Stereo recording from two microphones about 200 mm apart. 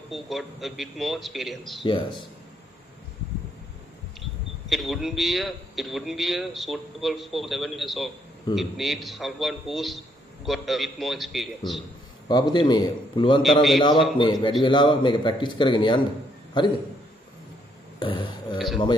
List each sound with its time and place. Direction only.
0.1 s speech: centre (ahead or behind)
1.9 s a man's voice: 25° left (ahead or behind)
4.2 s speech: centre (ahead or behind)
12.3 s a man's voice: 20° left (ahead or behind)
13.4 s speech: centre (ahead or behind)
13.7 s a man's voice: 25° left (ahead or behind)
17.9 s a sound: 25° left (ahead or behind)